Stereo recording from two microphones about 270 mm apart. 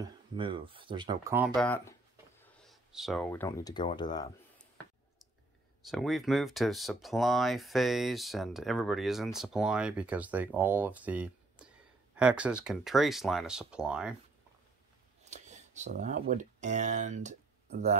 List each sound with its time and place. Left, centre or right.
0.0 s speech: centre
5.8 s speech: centre
15.2 s speech: right